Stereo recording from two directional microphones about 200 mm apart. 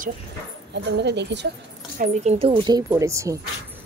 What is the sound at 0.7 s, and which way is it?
Speech, 60° right (ahead or behind).